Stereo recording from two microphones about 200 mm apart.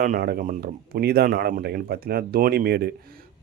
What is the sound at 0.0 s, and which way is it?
Speech, 45° right (ahead or behind).